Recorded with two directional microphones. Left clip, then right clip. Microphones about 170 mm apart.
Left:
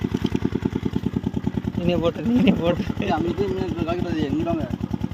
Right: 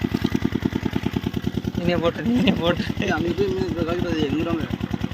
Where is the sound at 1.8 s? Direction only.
25° left (ahead or behind).